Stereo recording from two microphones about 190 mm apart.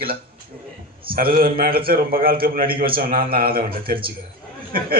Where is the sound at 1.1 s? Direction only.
50° right (ahead or behind).